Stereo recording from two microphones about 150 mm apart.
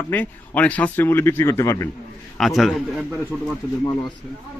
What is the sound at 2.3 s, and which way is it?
A man's voice, centre (ahead or behind).